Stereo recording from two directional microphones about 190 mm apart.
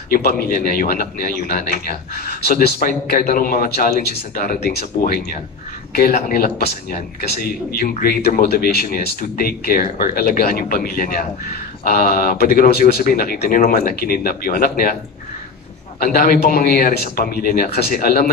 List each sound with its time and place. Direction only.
0.1 s speech: 50° left (ahead or behind)
16.0 s speech: 50° left (ahead or behind)